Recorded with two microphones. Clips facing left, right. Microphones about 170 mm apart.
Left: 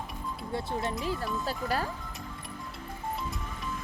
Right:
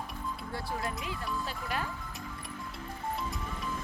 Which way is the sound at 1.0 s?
40° left (ahead or behind).